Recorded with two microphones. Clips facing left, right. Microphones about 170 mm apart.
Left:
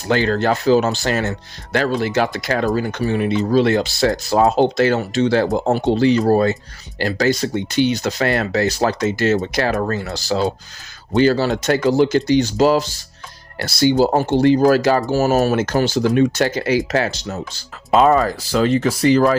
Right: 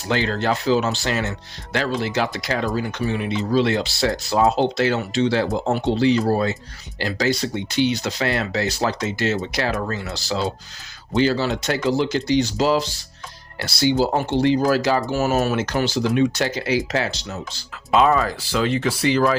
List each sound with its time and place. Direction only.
0.1 s speech: 50° left (ahead or behind)